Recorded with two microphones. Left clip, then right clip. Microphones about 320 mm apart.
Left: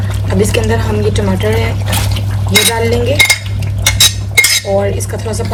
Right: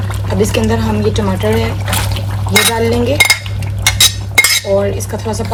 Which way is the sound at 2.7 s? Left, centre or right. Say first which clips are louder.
Even; centre.